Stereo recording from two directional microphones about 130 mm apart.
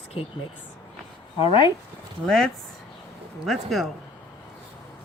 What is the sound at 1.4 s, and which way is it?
Speech, 40° left (ahead or behind).